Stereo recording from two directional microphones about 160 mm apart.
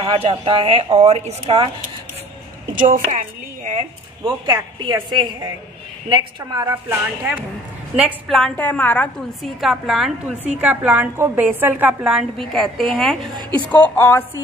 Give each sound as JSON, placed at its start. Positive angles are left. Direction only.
{"t": 0.0, "sound": "a woman's voice", "side_deg": -35}
{"t": 2.7, "sound": "a sound", "side_deg": -55}
{"t": 4.2, "sound": "a woman's voice", "side_deg": -30}
{"t": 6.6, "sound": "a woman's voice", "side_deg": -15}
{"t": 8.3, "sound": "a woman's voice", "side_deg": 5}
{"t": 9.6, "sound": "a woman's voice", "side_deg": 0}